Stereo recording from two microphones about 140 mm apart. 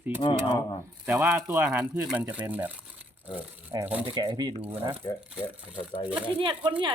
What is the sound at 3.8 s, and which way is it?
Speech, 10° right (ahead or behind).